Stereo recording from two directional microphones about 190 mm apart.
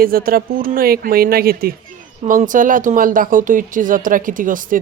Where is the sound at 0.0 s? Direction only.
50° right (ahead or behind).